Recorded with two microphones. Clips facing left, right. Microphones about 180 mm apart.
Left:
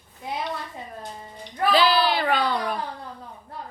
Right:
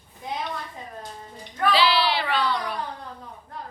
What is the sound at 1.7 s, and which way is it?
A woman's voice, 45° left (ahead or behind).